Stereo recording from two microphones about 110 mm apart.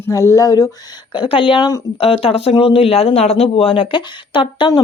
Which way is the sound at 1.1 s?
55° left (ahead or behind).